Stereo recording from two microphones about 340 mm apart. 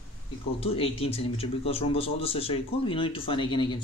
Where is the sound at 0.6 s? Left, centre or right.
Centre.